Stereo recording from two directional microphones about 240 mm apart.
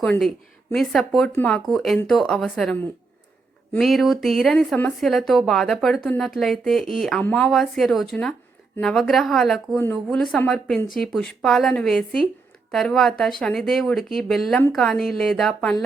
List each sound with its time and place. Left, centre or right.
0.0 s speech: centre